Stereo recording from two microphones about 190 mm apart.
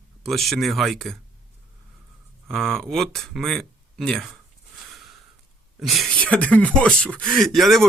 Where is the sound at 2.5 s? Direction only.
Centre (ahead or behind).